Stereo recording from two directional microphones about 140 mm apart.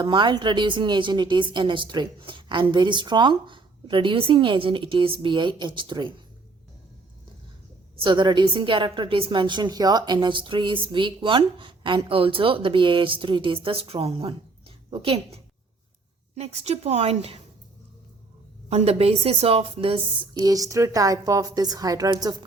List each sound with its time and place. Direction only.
0.0 s a woman's voice: 35° right (ahead or behind)
7.9 s a woman's voice: 35° right (ahead or behind)
18.7 s a woman's voice: 45° right (ahead or behind)
20.3 s a woman's voice: 25° right (ahead or behind)